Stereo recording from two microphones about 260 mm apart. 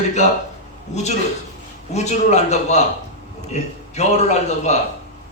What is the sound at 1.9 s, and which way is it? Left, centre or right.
A man's voice, left.